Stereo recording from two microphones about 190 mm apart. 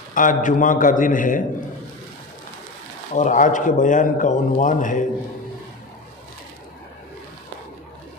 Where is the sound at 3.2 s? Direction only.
40° left (ahead or behind).